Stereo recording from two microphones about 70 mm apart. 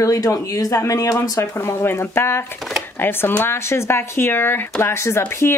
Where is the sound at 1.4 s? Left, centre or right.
Left.